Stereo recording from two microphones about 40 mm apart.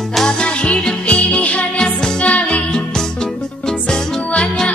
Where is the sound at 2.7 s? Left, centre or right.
Centre.